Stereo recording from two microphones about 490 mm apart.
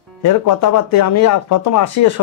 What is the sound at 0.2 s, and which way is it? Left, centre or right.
Speech, left.